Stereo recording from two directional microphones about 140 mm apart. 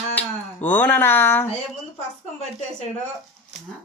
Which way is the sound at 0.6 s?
15° left (ahead or behind).